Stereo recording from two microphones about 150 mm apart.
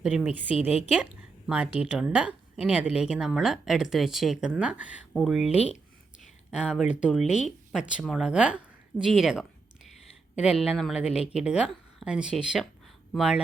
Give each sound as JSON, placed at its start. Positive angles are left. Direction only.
{"t": 0.0, "sound": "a woman's voice", "side_deg": -10}
{"t": 0.5, "sound": "a woman's voice", "side_deg": 45}
{"t": 1.5, "sound": "speech", "side_deg": -10}
{"t": 6.2, "sound": "a sound", "side_deg": 0}
{"t": 7.4, "sound": "speech", "side_deg": -5}